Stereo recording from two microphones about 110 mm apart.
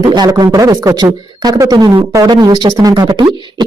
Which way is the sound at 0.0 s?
45° right (ahead or behind).